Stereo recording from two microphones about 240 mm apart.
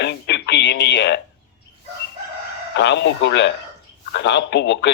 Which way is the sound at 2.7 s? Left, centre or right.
Left.